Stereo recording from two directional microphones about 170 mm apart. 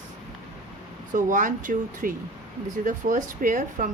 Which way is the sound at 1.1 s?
50° right (ahead or behind).